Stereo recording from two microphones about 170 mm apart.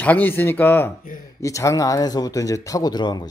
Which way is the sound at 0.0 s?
10° left (ahead or behind).